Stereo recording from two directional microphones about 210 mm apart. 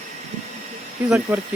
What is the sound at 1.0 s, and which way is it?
Speech, centre (ahead or behind).